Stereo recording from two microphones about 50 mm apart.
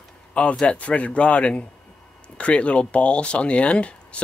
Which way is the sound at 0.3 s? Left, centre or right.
Left.